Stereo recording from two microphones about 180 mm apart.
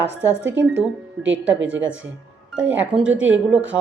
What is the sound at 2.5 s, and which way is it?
A woman's voice, 5° right (ahead or behind).